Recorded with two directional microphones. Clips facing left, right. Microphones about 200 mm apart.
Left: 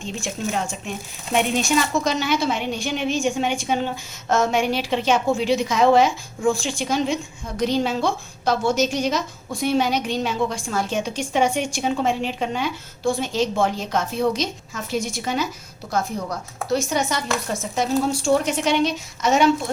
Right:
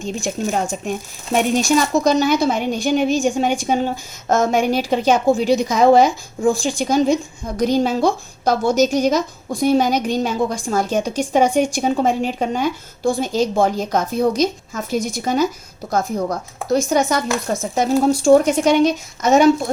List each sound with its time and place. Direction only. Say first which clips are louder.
0.0 s speech: right 5 dB; 45° right (ahead or behind)